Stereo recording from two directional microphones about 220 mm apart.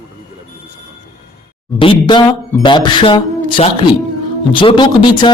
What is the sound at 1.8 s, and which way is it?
Speech, 20° left (ahead or behind).